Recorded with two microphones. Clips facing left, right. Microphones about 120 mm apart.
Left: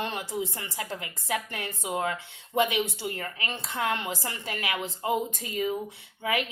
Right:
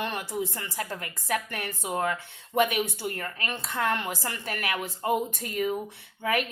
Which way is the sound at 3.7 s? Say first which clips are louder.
Right 1 dB; 20° left (ahead or behind).